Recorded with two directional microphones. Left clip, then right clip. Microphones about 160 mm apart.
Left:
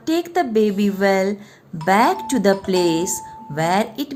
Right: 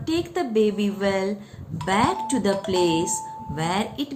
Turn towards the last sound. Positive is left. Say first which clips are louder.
# left 6 dB
turn(degrees=65)  # may be behind; listen again after turning